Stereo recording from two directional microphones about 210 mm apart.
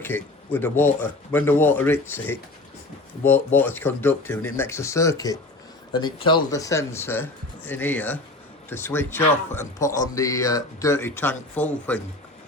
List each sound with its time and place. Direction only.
0.0 s a man's voice: 10° left (ahead or behind)